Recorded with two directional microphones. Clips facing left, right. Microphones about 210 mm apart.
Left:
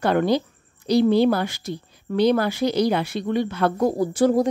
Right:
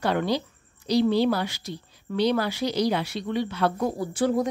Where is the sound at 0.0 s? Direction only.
50° left (ahead or behind).